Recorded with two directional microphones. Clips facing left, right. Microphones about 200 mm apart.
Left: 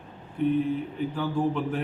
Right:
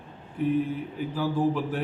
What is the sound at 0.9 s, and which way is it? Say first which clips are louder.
Speech: even; 5° right (ahead or behind).